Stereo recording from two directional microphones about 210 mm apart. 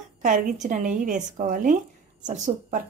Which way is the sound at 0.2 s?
40° right (ahead or behind).